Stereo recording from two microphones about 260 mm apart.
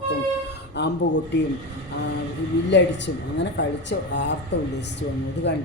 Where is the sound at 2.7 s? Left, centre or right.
Left.